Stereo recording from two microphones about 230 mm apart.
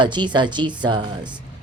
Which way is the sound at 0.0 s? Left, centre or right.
Centre.